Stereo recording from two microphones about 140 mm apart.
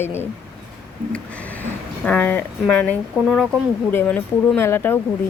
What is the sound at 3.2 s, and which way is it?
Speech, 5° right (ahead or behind).